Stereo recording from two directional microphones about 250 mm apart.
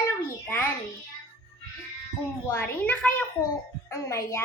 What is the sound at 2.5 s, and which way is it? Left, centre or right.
A woman's voice, centre.